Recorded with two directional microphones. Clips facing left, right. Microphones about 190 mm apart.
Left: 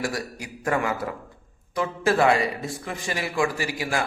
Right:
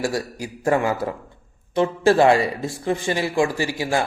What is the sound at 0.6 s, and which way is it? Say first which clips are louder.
Speech: right 5 dB; 25° right (ahead or behind).